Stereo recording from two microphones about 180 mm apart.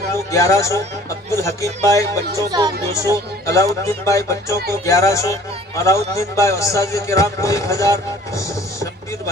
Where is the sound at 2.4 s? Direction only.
20° right (ahead or behind).